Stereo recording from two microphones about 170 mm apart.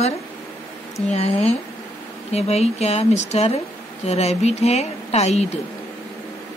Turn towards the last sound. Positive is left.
turn(degrees=40)  # may be behind; listen again after turning